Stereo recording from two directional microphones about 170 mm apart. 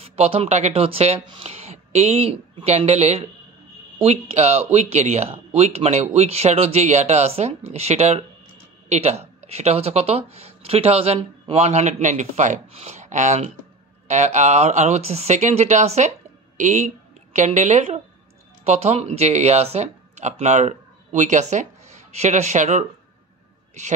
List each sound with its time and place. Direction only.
0.0 s a woman's voice: 35° right (ahead or behind)